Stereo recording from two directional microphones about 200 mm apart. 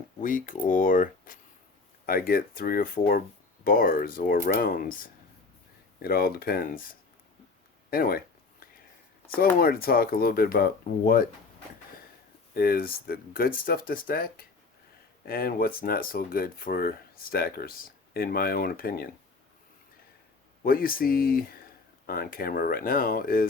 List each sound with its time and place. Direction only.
0.2 s speech: 45° left (ahead or behind)
9.6 s speech: 45° left (ahead or behind)
12.5 s speech: 50° left (ahead or behind)
20.7 s speech: 45° left (ahead or behind)